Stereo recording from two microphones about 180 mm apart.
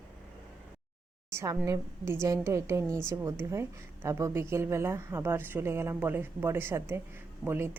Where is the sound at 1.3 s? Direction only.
15° right (ahead or behind).